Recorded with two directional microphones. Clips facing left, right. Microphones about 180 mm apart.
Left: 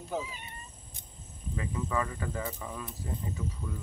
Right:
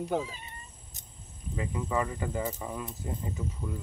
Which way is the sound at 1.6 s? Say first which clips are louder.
Right 2 dB; 15° right (ahead or behind).